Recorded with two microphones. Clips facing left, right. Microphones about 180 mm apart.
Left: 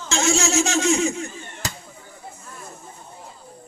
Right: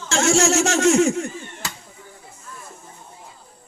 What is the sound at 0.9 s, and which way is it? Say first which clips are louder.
Speech: right 4 dB; 75° right (ahead or behind).